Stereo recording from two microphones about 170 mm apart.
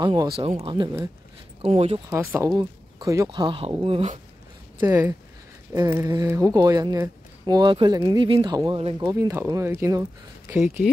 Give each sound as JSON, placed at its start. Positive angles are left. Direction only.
{"t": 0.0, "sound": "speech", "side_deg": -25}
{"t": 2.0, "sound": "speech", "side_deg": -15}
{"t": 4.7, "sound": "speech", "side_deg": -20}
{"t": 9.1, "sound": "speech", "side_deg": -15}